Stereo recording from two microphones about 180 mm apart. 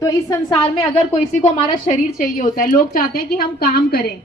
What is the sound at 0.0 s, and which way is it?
A woman's voice, 20° left (ahead or behind).